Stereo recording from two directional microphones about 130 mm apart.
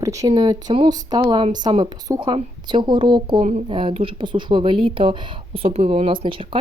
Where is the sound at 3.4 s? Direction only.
65° right (ahead or behind).